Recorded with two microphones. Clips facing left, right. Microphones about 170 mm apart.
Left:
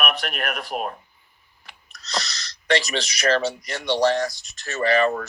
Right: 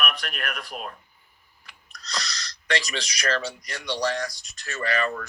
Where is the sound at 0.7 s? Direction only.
50° left (ahead or behind).